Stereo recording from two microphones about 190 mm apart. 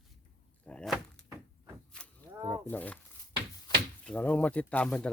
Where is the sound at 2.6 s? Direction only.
10° left (ahead or behind).